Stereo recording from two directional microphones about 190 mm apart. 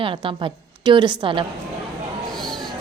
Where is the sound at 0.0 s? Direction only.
25° right (ahead or behind).